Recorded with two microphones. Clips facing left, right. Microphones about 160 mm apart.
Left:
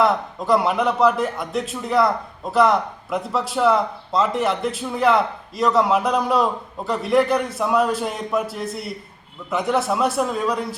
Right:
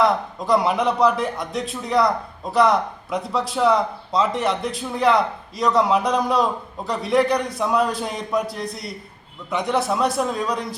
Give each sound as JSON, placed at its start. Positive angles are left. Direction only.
{"t": 0.0, "sound": "a man's voice", "side_deg": 0}